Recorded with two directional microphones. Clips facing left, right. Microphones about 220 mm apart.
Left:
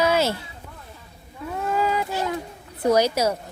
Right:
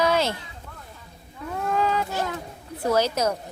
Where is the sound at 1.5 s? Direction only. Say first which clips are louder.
Left 1 dB; 5° left (ahead or behind).